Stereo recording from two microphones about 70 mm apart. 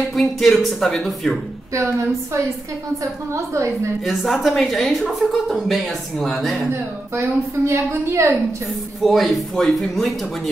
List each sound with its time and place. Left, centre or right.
0.1 s a woman's voice: centre
1.7 s a woman's voice: right
4.0 s a woman's voice: centre
6.7 s a woman's voice: right
9.0 s a woman's voice: centre